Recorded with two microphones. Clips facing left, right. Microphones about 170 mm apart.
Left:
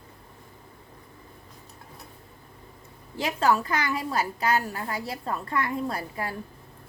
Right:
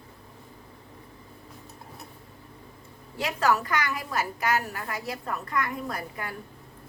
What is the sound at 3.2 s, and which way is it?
A woman's voice, 25° left (ahead or behind).